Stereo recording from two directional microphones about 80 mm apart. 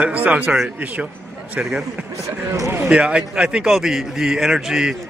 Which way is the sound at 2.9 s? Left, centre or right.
Centre.